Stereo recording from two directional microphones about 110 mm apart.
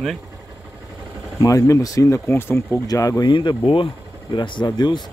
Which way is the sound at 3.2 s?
45° left (ahead or behind).